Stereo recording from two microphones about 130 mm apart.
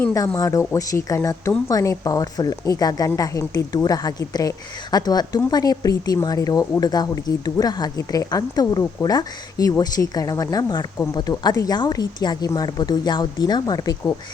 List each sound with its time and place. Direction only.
0.3 s speech: 25° left (ahead or behind)